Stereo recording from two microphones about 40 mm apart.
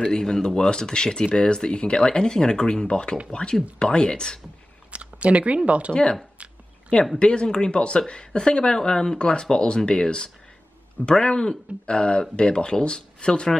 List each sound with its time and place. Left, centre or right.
0.0 s speech: centre
4.9 s a sound: right
5.7 s speech: right
7.2 s speech: left